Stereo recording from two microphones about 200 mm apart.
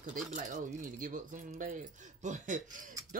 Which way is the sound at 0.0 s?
40° right (ahead or behind).